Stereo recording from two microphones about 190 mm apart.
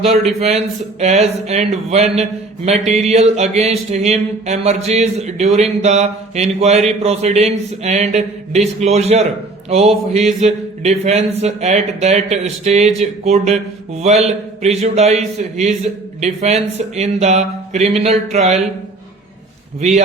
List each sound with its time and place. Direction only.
0.0 s mantra: 35° right (ahead or behind)